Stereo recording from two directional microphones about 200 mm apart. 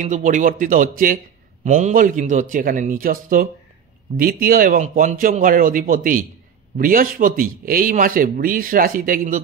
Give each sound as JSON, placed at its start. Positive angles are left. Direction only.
{"t": 0.0, "sound": "a man's voice", "side_deg": -40}